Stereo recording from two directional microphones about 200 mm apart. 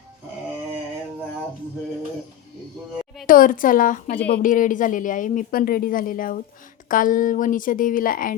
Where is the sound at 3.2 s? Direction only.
45° left (ahead or behind).